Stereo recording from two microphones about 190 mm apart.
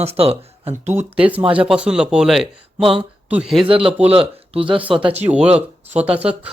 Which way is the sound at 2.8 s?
30° right (ahead or behind).